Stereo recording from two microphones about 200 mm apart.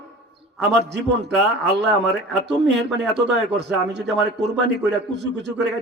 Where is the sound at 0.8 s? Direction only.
60° right (ahead or behind).